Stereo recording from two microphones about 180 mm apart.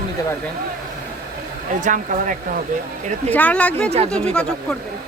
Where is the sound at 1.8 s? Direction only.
45° right (ahead or behind).